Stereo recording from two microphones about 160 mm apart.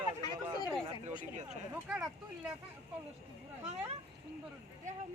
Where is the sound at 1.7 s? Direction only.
10° right (ahead or behind).